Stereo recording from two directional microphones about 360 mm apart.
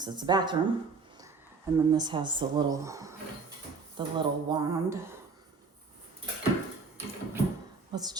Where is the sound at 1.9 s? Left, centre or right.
Centre.